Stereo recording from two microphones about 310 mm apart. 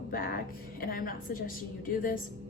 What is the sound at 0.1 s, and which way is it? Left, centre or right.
Speech, left.